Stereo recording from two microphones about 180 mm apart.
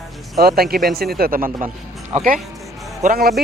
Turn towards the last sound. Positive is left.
turn(degrees=-55)  # may be behind; listen again after turning